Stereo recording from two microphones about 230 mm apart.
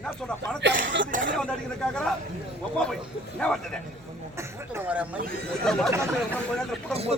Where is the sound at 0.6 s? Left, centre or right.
Right.